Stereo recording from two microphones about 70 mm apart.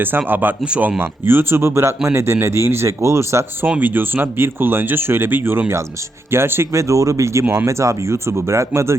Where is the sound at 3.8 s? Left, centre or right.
Right.